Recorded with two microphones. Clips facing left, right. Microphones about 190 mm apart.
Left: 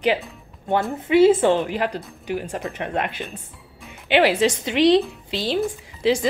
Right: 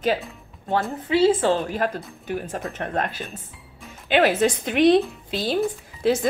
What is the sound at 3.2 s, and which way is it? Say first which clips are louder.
Music: left 2 dB; centre (ahead or behind).